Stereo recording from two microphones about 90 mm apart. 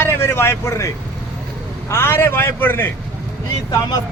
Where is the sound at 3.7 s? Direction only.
45° left (ahead or behind).